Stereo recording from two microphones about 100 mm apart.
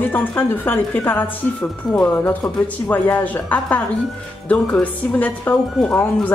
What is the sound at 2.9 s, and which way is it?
A woman's voice, 15° left (ahead or behind).